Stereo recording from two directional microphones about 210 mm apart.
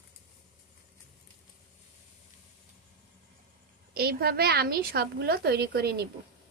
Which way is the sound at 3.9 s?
45° right (ahead or behind).